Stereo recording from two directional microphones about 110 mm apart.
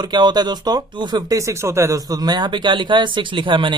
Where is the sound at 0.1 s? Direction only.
40° right (ahead or behind); by 2.0 s 25° right (ahead or behind).